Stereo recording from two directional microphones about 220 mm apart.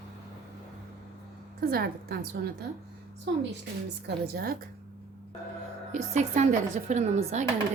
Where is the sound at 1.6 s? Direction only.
45° right (ahead or behind).